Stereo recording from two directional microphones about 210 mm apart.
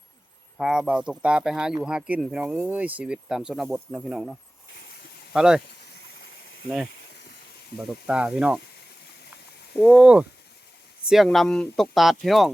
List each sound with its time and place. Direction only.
0.5 s speech: 5° right (ahead or behind)
8.0 s speech: 5° right (ahead or behind)
9.7 s speech: centre (ahead or behind)